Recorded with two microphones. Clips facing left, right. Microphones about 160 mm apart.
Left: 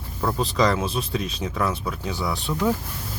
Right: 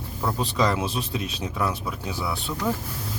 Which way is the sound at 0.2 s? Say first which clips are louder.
Left 2 dB; 5° right (ahead or behind).